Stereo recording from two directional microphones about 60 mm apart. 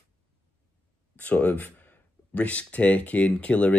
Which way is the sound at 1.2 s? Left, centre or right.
Left.